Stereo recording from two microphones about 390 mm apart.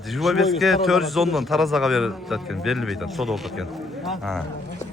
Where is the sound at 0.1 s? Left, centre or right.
Centre.